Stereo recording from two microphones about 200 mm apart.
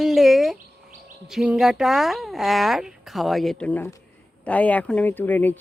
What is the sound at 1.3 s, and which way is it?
Speech, centre (ahead or behind).